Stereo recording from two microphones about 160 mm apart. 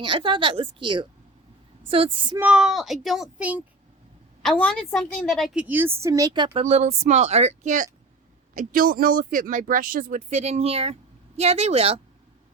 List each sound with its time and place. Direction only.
0.0 s a woman's voice: 30° right (ahead or behind)
2.4 s a child's voice: 5° right (ahead or behind)
4.4 s a child's voice: 5° left (ahead or behind)
5.6 s speech: 15° right (ahead or behind); by 6.6 s 30° right (ahead or behind)
6.6 s a woman's voice: 40° right (ahead or behind)
8.5 s a woman's voice: 65° right (ahead or behind); by 11.9 s 40° right (ahead or behind)